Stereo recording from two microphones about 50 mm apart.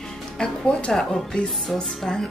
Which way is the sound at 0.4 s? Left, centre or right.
Left.